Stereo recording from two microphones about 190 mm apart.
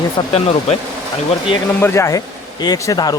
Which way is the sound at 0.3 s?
30° left (ahead or behind).